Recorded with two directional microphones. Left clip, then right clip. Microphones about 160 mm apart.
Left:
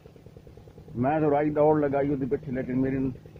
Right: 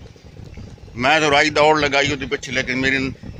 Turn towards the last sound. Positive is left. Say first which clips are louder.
# right 10 dB
turn(degrees=-20)  # may be behind; listen again after turning